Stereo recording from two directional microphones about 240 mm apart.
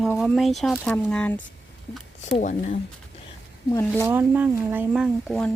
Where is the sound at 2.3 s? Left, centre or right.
Left.